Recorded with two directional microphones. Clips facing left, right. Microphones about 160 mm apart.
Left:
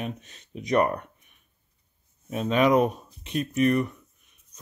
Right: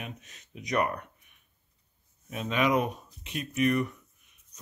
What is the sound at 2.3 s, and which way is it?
Speech, 35° left (ahead or behind).